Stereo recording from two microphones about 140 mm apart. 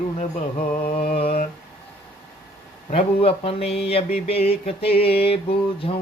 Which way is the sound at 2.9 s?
45° left (ahead or behind).